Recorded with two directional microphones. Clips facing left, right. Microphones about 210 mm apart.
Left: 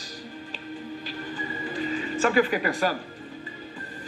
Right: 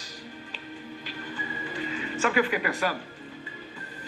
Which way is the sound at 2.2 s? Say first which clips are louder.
Left 3 dB; 35° left (ahead or behind).